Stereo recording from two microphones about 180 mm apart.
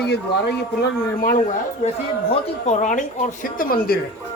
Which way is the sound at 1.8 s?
35° left (ahead or behind).